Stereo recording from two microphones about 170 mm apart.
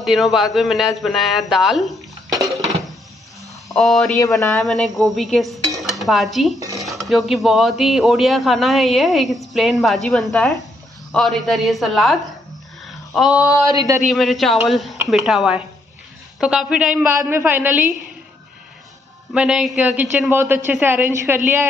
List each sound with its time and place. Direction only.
0.0 s speech: centre (ahead or behind)
3.7 s speech: centre (ahead or behind)
12.8 s a sound: centre (ahead or behind)
13.7 s speech: 20° right (ahead or behind)
14.0 s a man's voice: centre (ahead or behind)
19.3 s a man's voice: 5° right (ahead or behind)